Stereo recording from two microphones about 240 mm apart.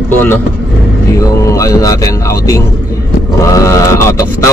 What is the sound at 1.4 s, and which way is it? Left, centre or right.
A man's voice, centre.